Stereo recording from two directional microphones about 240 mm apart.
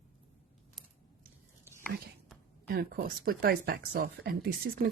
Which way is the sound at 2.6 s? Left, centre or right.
Right.